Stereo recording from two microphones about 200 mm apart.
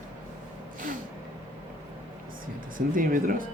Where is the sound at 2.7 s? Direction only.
45° right (ahead or behind).